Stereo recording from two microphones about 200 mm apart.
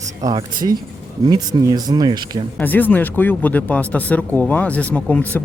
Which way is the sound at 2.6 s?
10° left (ahead or behind).